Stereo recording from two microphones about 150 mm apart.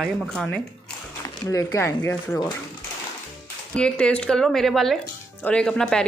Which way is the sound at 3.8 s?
5° left (ahead or behind).